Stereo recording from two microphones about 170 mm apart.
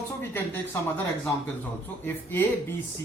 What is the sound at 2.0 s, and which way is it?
Speech, 10° left (ahead or behind).